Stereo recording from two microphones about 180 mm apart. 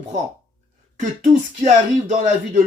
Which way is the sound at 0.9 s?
40° right (ahead or behind).